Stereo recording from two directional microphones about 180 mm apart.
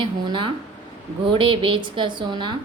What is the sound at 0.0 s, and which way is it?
A woman's voice, 25° right (ahead or behind).